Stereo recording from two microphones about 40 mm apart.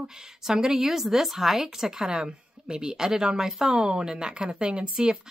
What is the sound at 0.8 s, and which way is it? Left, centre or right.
Speech, centre.